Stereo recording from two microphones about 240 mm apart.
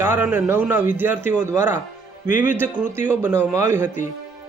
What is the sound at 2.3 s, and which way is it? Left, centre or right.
Speech, left.